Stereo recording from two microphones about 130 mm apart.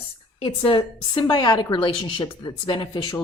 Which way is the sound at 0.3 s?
40° left (ahead or behind).